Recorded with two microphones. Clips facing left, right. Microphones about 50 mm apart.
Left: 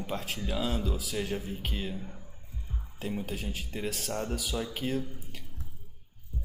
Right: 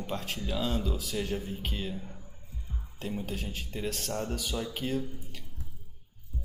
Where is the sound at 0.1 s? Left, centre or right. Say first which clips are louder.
Even; centre.